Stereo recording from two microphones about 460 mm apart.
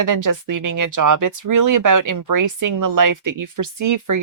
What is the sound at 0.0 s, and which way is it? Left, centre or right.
Speech, right.